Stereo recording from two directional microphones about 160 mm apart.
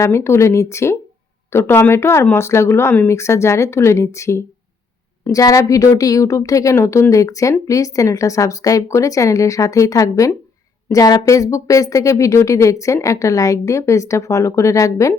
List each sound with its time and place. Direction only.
0.0 s speech: 15° left (ahead or behind)